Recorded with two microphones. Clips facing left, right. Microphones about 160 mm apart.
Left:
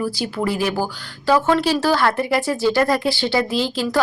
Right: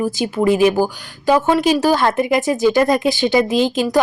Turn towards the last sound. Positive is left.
turn(degrees=-20)  # may be behind; listen again after turning